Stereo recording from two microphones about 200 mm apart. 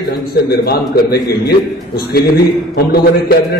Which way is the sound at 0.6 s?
55° left (ahead or behind).